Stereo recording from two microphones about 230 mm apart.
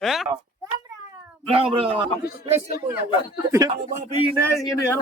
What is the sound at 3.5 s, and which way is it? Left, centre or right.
Speech, centre.